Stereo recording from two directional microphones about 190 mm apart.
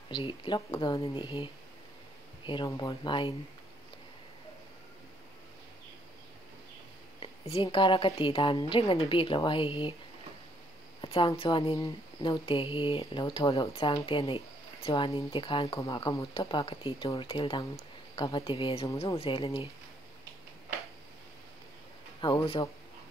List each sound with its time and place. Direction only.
0.1 s speech: 25° left (ahead or behind)
7.2 s speech: 30° left (ahead or behind)
11.0 s speech: 25° left (ahead or behind)
22.2 s speech: 25° left (ahead or behind)